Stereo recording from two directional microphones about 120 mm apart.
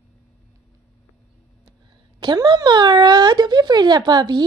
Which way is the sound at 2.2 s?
40° right (ahead or behind).